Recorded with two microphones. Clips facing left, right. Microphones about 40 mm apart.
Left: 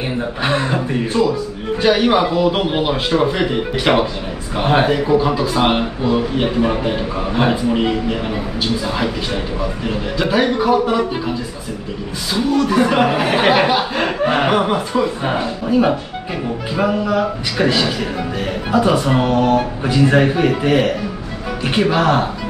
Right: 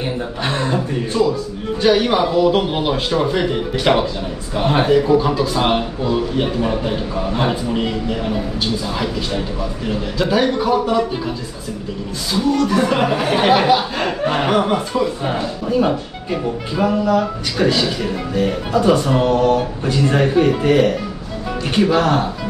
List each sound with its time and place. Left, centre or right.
0.4 s speech: centre
12.4 s speech: centre